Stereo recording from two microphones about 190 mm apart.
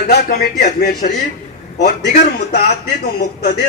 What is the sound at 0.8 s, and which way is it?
Speech, 50° left (ahead or behind).